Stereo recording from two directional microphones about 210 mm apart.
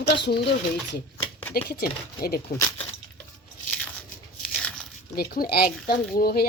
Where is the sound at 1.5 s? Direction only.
45° left (ahead or behind).